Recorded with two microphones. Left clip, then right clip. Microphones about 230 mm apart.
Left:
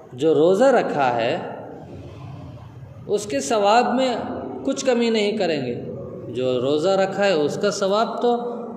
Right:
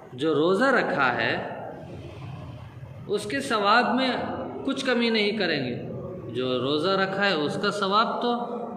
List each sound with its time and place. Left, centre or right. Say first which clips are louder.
0.2 s a man's voice: left 6 dB; left
3.1 s a man's voice: left 5 dB; left